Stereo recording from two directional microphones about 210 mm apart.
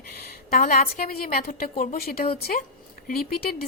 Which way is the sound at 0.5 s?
45° left (ahead or behind).